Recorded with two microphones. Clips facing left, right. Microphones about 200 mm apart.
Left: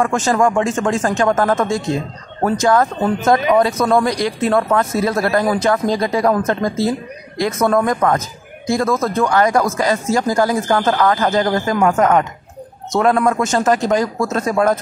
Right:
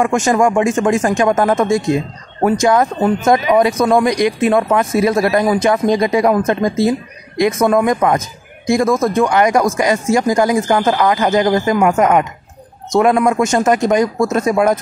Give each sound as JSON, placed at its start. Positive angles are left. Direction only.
{"t": 0.0, "sound": "speech", "side_deg": -15}